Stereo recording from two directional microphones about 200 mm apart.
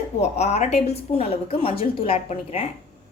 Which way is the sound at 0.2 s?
35° left (ahead or behind).